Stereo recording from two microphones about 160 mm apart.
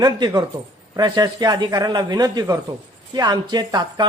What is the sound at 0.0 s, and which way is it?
Speech, 25° right (ahead or behind).